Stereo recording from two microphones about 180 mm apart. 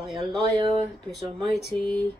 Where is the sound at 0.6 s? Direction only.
25° right (ahead or behind).